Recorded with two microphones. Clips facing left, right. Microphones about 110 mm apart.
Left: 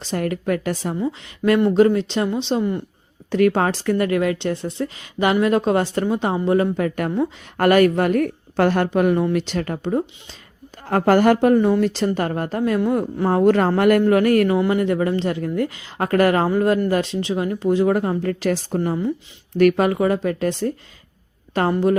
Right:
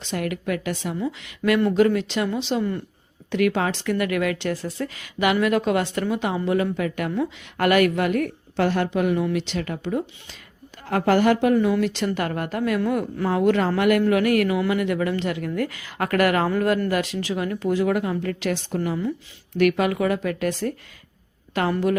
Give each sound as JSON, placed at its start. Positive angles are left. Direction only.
{"t": 0.0, "sound": "speech", "side_deg": 35}
{"t": 0.9, "sound": "speech", "side_deg": 30}
{"t": 3.3, "sound": "speech", "side_deg": 40}
{"t": 18.8, "sound": "speech", "side_deg": 25}
{"t": 19.5, "sound": "a woman's voice", "side_deg": 40}